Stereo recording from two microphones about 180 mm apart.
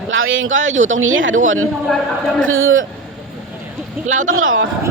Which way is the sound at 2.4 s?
90° right.